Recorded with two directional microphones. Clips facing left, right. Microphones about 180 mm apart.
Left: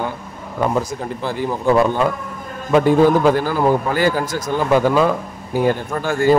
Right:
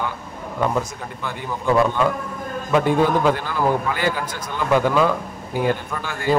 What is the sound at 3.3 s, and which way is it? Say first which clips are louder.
Speech: left 4 dB; 35° left (ahead or behind).